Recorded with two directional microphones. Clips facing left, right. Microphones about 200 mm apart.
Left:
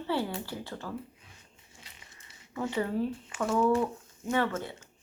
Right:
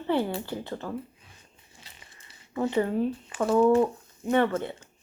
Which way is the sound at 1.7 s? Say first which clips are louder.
Right 1 dB; 30° right (ahead or behind).